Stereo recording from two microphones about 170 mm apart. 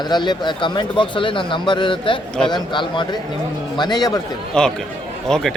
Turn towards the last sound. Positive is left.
turn(degrees=0)  # may be behind; listen again after turning